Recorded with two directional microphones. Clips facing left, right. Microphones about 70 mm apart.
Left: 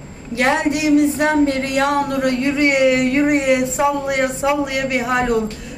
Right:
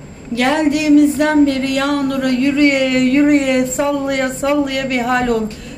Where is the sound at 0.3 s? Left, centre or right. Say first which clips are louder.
Right 3 dB; left.